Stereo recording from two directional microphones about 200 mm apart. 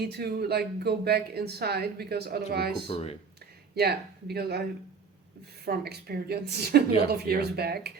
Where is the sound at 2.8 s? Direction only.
30° left (ahead or behind).